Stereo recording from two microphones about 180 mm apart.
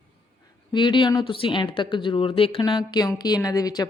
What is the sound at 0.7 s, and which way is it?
Speech, 25° left (ahead or behind).